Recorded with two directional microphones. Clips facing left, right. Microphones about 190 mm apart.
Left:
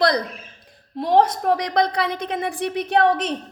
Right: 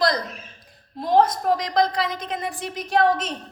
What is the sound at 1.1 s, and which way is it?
A woman's voice, 65° left (ahead or behind).